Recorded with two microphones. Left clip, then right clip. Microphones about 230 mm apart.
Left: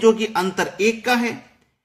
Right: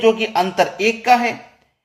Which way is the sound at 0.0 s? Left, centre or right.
Left.